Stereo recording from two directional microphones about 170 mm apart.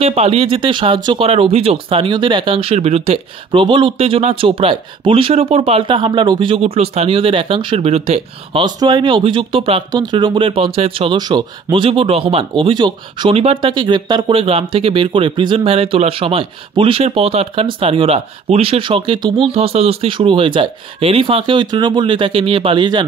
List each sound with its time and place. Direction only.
0.0 s speech: 35° right (ahead or behind)
8.6 s speech: 25° right (ahead or behind)